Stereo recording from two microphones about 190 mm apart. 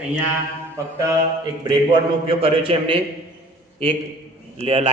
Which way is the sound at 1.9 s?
30° right (ahead or behind).